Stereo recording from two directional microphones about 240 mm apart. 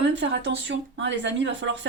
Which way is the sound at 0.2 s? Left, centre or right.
Right.